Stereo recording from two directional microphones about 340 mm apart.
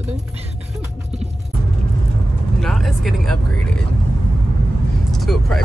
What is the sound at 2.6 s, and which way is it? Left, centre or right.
Speech, centre.